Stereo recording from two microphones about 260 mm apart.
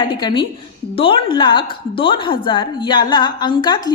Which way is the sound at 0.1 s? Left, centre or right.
Centre.